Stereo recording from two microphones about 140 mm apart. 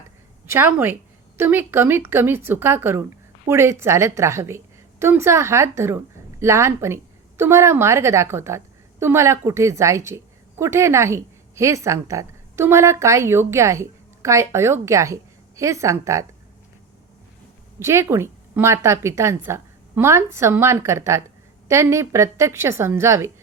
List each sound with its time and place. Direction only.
0.4 s a woman's voice: 15° right (ahead or behind)
17.7 s a woman's voice: 20° right (ahead or behind)